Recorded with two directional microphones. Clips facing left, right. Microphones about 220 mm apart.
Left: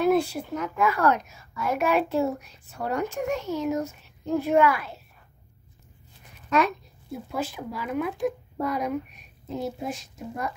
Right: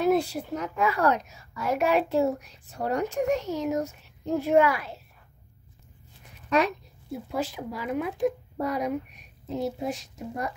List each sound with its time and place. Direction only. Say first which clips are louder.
0.0 s a woman's voice: left 1 dB; 35° right (ahead or behind)
7.3 s a woman's voice: even; 35° right (ahead or behind)